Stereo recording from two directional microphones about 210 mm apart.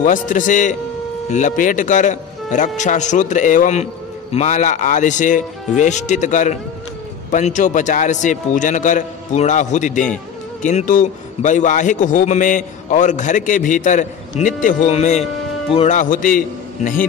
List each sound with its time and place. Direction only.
0.0 s a man's voice: 40° left (ahead or behind)